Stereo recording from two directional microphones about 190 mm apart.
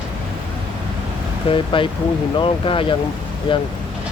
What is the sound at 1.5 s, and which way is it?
Speech, 25° left (ahead or behind).